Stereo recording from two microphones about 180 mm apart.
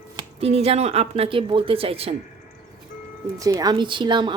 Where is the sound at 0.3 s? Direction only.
35° right (ahead or behind).